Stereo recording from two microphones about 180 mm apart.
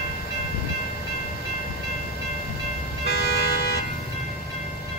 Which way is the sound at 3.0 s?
65° left (ahead or behind).